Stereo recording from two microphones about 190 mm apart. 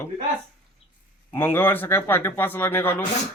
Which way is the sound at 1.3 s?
15° left (ahead or behind).